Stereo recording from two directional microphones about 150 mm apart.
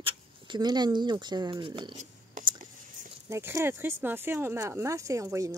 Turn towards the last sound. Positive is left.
turn(degrees=-20)  # may be behind; listen again after turning